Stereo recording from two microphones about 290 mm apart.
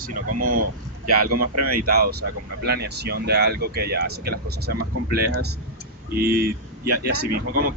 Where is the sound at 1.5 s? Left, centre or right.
Right.